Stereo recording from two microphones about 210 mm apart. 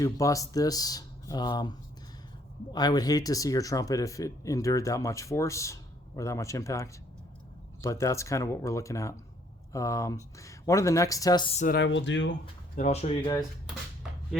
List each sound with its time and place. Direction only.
0.0 s speech: 15° left (ahead or behind)
2.7 s speech: 20° left (ahead or behind)
11.6 s speech: 50° left (ahead or behind)
12.7 s speech: 35° left (ahead or behind)